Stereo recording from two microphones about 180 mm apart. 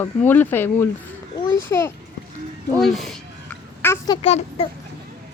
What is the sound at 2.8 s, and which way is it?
Speech, centre (ahead or behind).